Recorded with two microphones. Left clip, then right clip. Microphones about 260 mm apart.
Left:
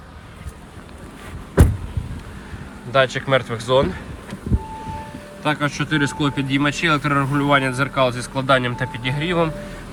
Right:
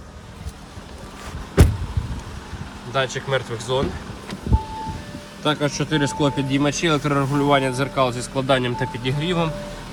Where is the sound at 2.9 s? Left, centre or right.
Centre.